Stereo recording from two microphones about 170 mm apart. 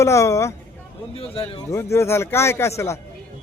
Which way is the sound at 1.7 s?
15° left (ahead or behind).